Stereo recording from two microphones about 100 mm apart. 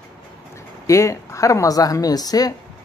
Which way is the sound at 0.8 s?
30° left (ahead or behind).